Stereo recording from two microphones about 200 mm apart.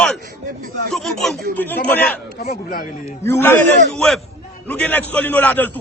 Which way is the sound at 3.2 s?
10° left (ahead or behind).